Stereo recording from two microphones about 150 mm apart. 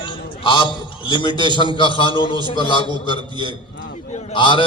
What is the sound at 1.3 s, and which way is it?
Speech, 30° right (ahead or behind).